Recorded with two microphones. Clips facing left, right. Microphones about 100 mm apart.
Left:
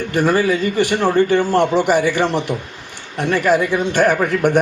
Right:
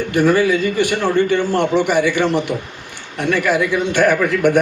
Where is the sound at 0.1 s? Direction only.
40° left (ahead or behind).